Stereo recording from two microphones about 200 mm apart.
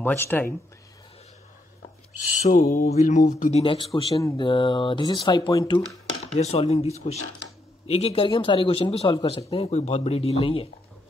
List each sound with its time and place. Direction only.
0.0 s speech: 10° left (ahead or behind)
2.4 s speech: 35° left (ahead or behind); by 5.8 s 20° left (ahead or behind)
6.2 s speech: 30° left (ahead or behind)